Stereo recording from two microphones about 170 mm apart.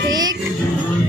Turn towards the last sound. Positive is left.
turn(degrees=-25)  # may be behind; listen again after turning